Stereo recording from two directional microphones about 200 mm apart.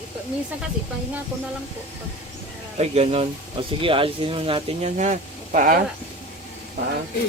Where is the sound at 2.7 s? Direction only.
30° right (ahead or behind).